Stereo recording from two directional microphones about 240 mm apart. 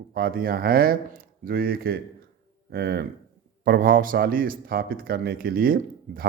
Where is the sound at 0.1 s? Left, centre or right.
Right.